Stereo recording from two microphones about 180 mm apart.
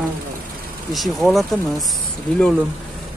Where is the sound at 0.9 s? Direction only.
Centre (ahead or behind).